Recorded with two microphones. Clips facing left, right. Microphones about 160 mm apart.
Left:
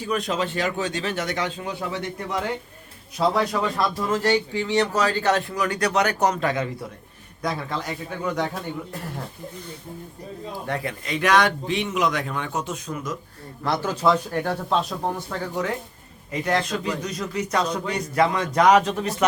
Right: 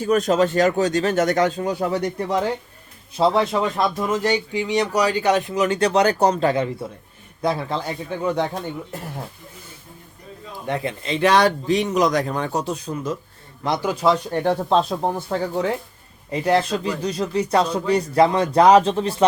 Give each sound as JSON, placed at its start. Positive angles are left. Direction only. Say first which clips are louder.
{"t": 0.0, "sound": "speech", "louder": "right 7 dB", "side_deg": -45}
{"t": 3.2, "sound": "speech", "louder": "right 3 dB", "side_deg": -25}
{"t": 10.7, "sound": "speech", "louder": "right 5 dB", "side_deg": -20}
{"t": 13.7, "sound": "speech", "louder": "right 2 dB", "side_deg": -15}
{"t": 14.7, "sound": "speech", "louder": "right 5 dB", "side_deg": -30}